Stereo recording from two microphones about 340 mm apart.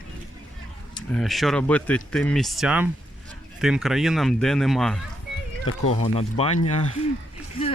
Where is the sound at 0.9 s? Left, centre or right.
Centre.